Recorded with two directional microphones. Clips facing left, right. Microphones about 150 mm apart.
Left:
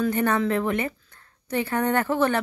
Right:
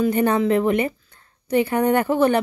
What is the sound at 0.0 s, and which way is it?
A woman's voice, 15° right (ahead or behind).